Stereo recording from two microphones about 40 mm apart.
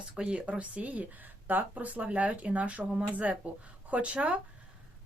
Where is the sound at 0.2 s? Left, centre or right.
Right.